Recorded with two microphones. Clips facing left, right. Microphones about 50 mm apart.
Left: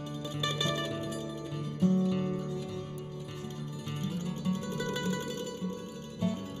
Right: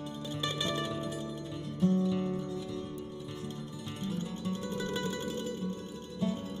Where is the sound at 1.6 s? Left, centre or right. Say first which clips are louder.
Left 1 dB; left.